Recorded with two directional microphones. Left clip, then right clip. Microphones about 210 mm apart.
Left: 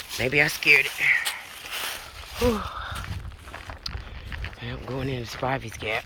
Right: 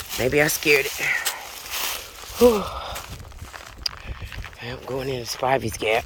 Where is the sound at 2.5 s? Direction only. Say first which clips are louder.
Right 5 dB; 45° right (ahead or behind).